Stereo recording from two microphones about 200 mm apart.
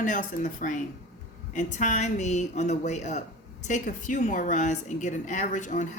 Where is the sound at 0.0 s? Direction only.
40° left (ahead or behind).